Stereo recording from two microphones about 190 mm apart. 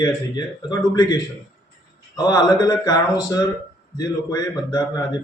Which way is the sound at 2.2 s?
20° left (ahead or behind).